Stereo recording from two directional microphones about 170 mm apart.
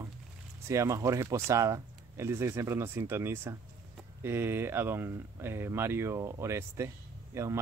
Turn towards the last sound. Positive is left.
turn(degrees=-15)  # may be behind; listen again after turning